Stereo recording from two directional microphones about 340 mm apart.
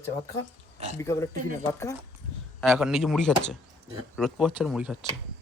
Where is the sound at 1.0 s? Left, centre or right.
Centre.